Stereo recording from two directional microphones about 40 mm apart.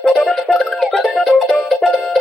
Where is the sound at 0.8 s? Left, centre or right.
Centre.